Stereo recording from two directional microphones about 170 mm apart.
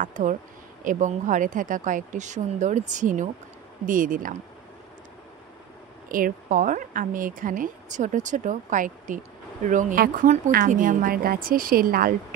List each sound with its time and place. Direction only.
0.0 s speech: 50° right (ahead or behind)
6.0 s a woman's voice: 55° right (ahead or behind)